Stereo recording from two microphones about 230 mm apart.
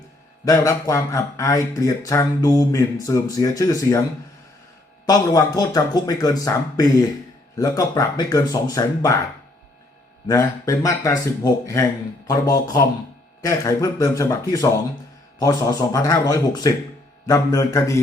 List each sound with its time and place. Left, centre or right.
0.4 s speech: centre
5.0 s speech: centre
10.2 s speech: centre